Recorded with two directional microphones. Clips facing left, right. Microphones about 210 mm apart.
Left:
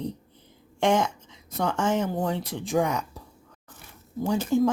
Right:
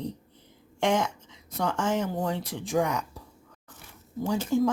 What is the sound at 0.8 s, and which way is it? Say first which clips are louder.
Speech: left 3 dB; 25° left (ahead or behind).